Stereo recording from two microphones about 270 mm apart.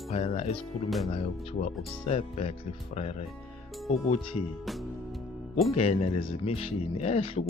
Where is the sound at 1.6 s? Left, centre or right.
Left.